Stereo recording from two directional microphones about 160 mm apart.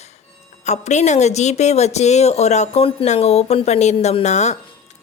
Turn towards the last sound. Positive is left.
turn(degrees=45)  # may be behind; listen again after turning